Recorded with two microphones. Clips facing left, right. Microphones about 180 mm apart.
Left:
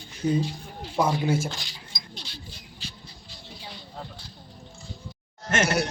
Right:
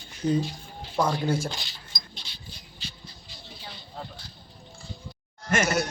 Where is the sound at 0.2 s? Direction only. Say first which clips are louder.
Even; 10° left (ahead or behind).